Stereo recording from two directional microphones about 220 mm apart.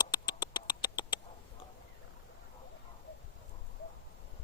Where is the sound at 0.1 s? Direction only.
20° left (ahead or behind).